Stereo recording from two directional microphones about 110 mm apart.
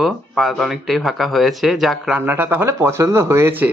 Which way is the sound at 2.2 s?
20° right (ahead or behind).